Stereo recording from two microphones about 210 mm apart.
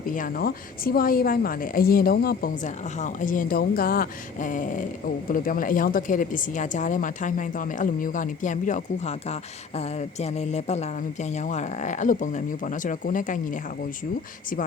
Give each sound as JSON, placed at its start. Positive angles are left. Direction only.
{"t": 0.0, "sound": "a woman's voice", "side_deg": 40}